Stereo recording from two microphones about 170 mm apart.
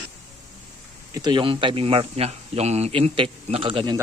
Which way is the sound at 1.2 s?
25° right (ahead or behind).